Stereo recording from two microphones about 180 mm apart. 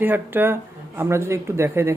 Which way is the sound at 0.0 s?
10° right (ahead or behind).